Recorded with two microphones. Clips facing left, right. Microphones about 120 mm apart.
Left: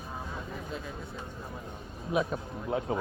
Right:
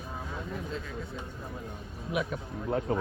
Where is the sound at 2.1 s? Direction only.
30° left (ahead or behind).